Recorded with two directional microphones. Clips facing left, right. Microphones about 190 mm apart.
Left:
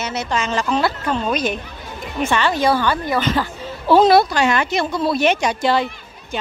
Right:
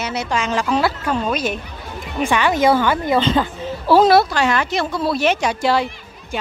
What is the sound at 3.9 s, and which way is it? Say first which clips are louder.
A woman's voice: even; 5° right (ahead or behind).